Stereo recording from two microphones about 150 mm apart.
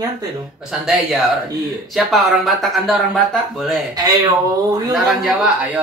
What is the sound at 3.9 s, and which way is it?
Speech, 25° right (ahead or behind).